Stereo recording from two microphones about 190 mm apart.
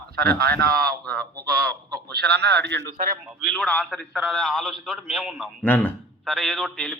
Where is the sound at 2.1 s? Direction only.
60° right (ahead or behind).